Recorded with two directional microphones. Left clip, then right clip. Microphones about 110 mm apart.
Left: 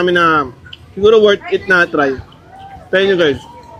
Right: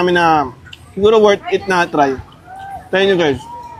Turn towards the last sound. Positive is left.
turn(degrees=-35)  # may be behind; listen again after turning